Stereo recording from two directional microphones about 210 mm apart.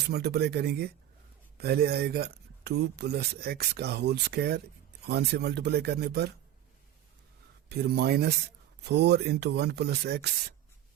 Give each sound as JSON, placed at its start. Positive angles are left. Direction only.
{"t": 0.1, "sound": "speech", "side_deg": -50}
{"t": 7.7, "sound": "speech", "side_deg": -50}